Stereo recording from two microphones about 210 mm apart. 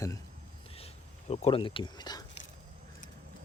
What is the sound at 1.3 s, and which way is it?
Speech, 30° left (ahead or behind).